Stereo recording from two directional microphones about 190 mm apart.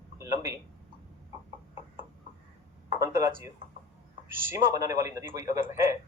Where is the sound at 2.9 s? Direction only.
15° right (ahead or behind).